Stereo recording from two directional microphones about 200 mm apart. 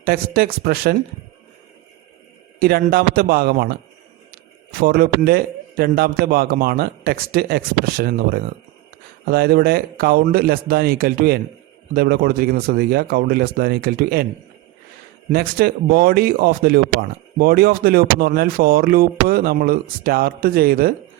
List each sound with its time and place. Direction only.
0.0 s speech: 50° right (ahead or behind)
2.6 s speech: 50° right (ahead or behind)
15.3 s speech: 50° right (ahead or behind)